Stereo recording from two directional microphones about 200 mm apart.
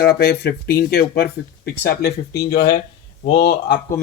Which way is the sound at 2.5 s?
55° left (ahead or behind).